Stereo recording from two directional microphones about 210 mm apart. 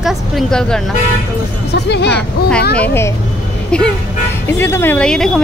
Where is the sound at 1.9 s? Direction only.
55° left (ahead or behind).